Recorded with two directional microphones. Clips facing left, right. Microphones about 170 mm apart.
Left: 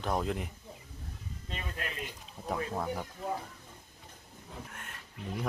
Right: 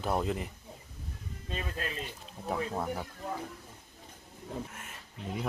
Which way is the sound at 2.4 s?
5° right (ahead or behind).